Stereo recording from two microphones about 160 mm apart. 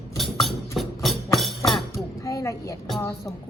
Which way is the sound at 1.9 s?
20° left (ahead or behind).